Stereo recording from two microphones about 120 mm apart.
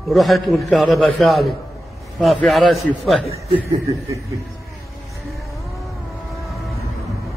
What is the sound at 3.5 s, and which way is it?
Snicker, 25° right (ahead or behind).